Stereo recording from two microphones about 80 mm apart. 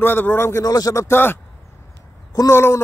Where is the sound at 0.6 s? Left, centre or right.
Left.